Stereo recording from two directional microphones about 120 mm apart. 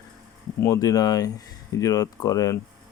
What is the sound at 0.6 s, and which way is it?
A man's voice, 30° left (ahead or behind).